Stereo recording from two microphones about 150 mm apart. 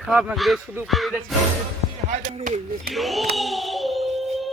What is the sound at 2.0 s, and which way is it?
Speech, 55° right (ahead or behind).